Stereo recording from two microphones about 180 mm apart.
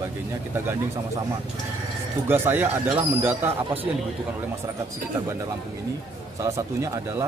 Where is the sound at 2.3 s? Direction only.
10° right (ahead or behind).